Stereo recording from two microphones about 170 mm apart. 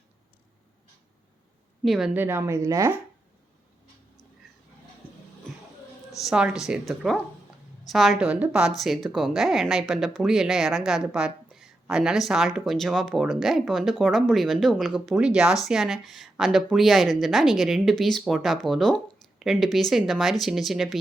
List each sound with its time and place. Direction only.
1.8 s a woman's voice: centre (ahead or behind)
2.2 s speech: 15° right (ahead or behind)
6.2 s a woman's voice: 5° right (ahead or behind)